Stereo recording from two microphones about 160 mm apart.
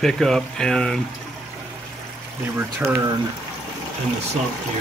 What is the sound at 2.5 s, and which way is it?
Speech, 15° right (ahead or behind).